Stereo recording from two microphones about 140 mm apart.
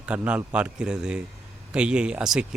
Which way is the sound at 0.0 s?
10° right (ahead or behind).